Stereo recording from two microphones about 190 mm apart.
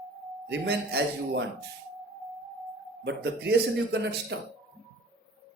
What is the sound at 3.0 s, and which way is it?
Speech, 60° right (ahead or behind).